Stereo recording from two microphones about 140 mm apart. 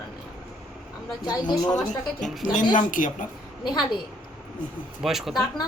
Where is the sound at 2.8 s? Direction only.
70° left (ahead or behind).